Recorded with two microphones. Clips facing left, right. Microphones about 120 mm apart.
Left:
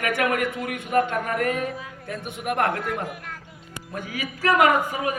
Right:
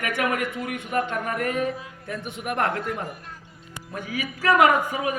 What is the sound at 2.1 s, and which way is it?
A man's voice, 55° left (ahead or behind).